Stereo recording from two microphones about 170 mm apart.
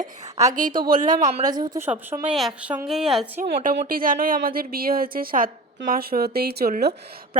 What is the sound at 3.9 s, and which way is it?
A woman's voice, 55° right (ahead or behind).